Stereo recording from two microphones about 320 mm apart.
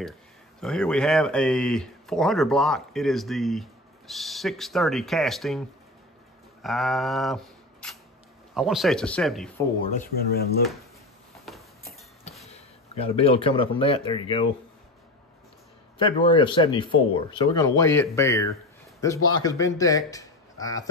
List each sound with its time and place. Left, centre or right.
0.6 s speech: centre
6.6 s speech: centre
9.9 s speech: left
11.5 s a sound: centre
12.4 s speech: centre
16.0 s speech: centre